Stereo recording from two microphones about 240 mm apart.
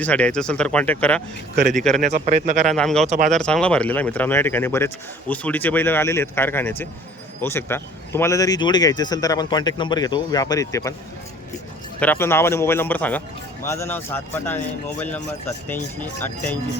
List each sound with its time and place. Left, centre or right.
0.0 s speech: centre
2.0 s speech: right
2.7 s speech: centre
3.1 s speech: right
3.3 s speech: centre
11.9 s speech: centre